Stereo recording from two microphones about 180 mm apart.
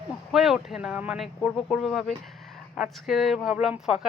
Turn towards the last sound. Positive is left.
turn(degrees=-5)  # may be behind; listen again after turning